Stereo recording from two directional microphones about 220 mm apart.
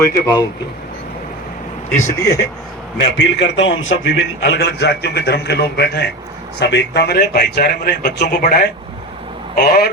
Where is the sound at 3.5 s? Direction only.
60° left (ahead or behind).